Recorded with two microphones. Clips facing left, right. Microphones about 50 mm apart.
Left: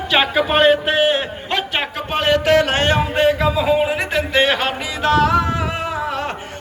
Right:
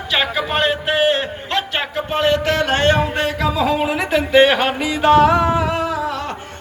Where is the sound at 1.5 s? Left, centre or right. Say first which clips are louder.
Even; centre.